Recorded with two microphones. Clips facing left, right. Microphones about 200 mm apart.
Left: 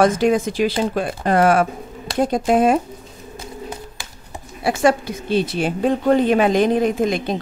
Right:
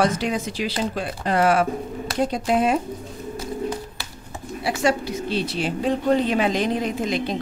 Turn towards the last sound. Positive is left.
turn(degrees=50)  # may be behind; listen again after turning